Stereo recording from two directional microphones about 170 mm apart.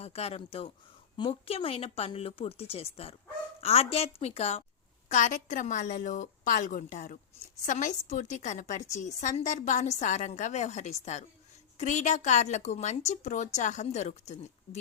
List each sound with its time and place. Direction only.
0.0 s a woman's voice: 35° left (ahead or behind)